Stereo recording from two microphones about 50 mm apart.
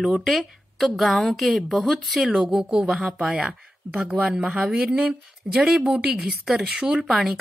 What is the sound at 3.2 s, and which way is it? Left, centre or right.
A woman's voice, centre.